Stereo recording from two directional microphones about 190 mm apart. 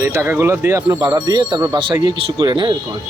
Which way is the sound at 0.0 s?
15° right (ahead or behind).